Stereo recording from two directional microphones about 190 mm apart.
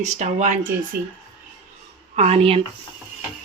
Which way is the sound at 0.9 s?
50° right (ahead or behind).